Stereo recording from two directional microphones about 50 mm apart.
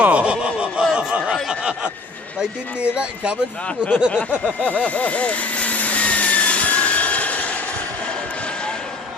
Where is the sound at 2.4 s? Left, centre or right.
Centre.